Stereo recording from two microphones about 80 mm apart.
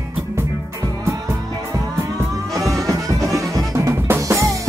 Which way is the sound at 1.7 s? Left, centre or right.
Right.